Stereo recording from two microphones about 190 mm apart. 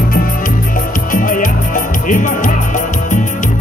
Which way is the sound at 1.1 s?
45° left (ahead or behind).